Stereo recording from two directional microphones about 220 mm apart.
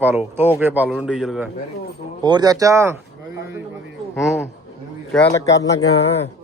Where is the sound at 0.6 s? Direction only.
10° right (ahead or behind).